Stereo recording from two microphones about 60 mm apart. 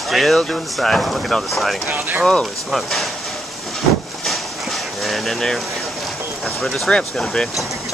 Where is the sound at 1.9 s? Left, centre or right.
Right.